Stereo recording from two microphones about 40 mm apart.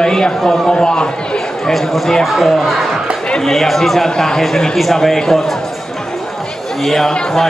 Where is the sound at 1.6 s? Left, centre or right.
Centre.